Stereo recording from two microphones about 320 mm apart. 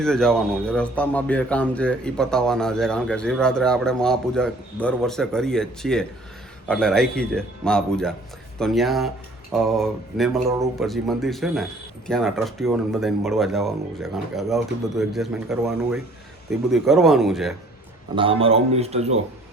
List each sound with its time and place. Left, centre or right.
0.0 s speech: centre
18.1 s a man's voice: centre